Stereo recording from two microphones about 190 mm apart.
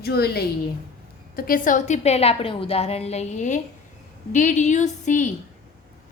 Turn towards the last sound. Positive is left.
turn(degrees=40)  # may be behind; listen again after turning